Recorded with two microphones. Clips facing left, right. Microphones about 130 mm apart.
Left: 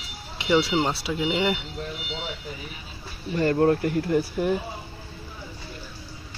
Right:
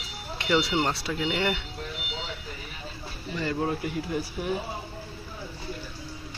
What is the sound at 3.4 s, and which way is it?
Speech, 55° left (ahead or behind).